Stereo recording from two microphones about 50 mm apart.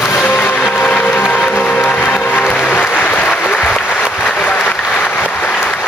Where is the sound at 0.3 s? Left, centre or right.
Left.